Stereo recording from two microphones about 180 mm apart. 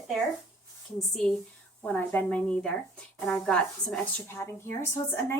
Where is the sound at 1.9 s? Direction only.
10° left (ahead or behind).